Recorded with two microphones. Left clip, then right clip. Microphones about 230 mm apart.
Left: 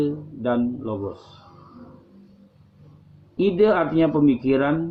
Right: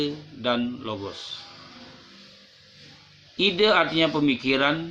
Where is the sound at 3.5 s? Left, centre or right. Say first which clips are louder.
Left 2 dB; right.